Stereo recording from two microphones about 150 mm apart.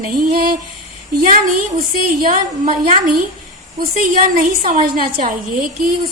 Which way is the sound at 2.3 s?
65° right (ahead or behind).